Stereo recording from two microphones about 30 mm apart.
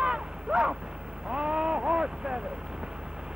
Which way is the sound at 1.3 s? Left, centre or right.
Right.